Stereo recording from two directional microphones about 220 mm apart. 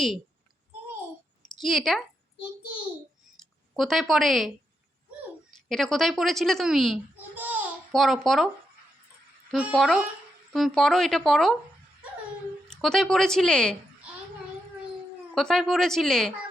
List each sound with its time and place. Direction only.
1.5 s a woman's voice: centre (ahead or behind)
3.8 s speech: centre (ahead or behind)
5.6 s speech: centre (ahead or behind)
9.5 s speech: centre (ahead or behind)
12.6 s speech: centre (ahead or behind)
15.4 s speech: centre (ahead or behind)